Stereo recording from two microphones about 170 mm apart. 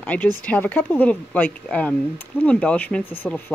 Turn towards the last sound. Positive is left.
turn(degrees=10)  # may be behind; listen again after turning